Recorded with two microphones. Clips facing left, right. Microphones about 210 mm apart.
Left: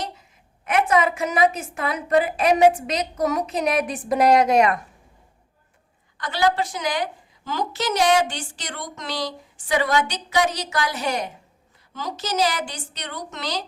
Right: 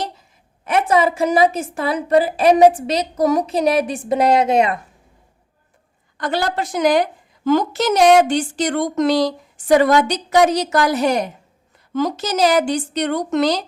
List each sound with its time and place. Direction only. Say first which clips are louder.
0.6 s a woman's voice: right 3 dB; 30° right (ahead or behind)
6.2 s a woman's voice: right 1 dB; 45° right (ahead or behind)